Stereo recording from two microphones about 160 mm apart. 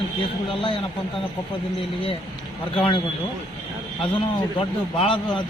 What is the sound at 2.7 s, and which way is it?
Speech, 30° left (ahead or behind).